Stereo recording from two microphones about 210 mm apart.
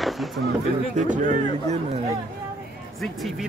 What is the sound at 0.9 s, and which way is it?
Speech, 35° right (ahead or behind).